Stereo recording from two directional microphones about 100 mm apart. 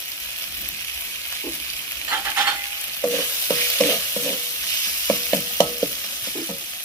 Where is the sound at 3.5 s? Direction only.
30° left (ahead or behind).